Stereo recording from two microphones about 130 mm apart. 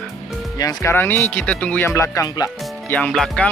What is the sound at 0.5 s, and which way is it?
Speech, 25° left (ahead or behind).